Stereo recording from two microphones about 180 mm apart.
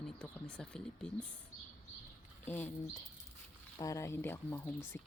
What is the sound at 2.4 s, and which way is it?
Speech, 10° left (ahead or behind).